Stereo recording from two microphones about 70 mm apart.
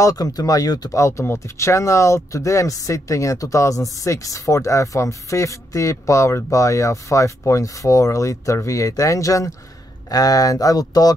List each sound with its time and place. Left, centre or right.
0.0 s speech: left
0.9 s speech: left